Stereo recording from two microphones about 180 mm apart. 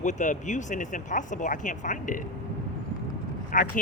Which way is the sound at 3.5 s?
50° left (ahead or behind).